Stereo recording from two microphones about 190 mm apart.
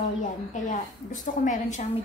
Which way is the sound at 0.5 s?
40° left (ahead or behind).